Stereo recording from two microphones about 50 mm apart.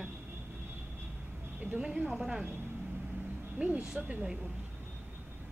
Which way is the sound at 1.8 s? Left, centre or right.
Right.